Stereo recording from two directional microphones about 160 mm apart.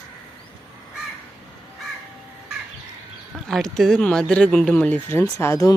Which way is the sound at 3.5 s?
Centre (ahead or behind).